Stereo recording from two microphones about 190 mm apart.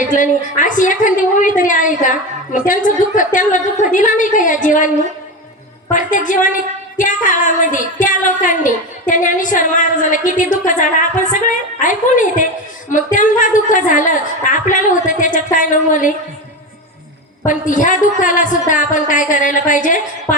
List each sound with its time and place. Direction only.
0.0 s a woman's voice: 40° left (ahead or behind)
5.9 s a woman's voice: 40° left (ahead or behind)
17.4 s a woman's voice: 45° left (ahead or behind)